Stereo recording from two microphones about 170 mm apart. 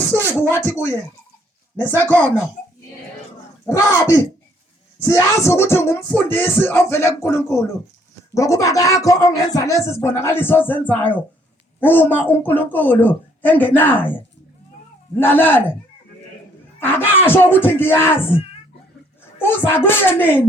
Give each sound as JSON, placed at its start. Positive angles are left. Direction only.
{"t": 0.0, "sound": "a sound", "side_deg": 10}
{"t": 3.7, "sound": "speech", "side_deg": 20}
{"t": 5.0, "sound": "speech", "side_deg": 20}
{"t": 15.2, "sound": "speech", "side_deg": 10}
{"t": 16.8, "sound": "speech", "side_deg": 15}
{"t": 19.4, "sound": "speech", "side_deg": 15}